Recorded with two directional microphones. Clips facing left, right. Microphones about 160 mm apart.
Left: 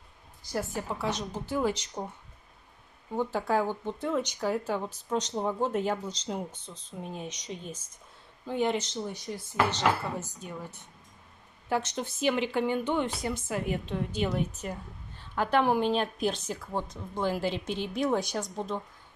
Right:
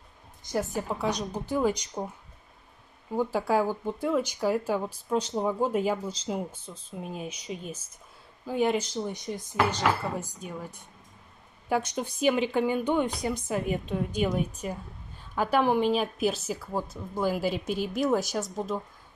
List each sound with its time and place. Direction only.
0.4 s speech: 20° right (ahead or behind)
3.2 s a woman's voice: 10° right (ahead or behind)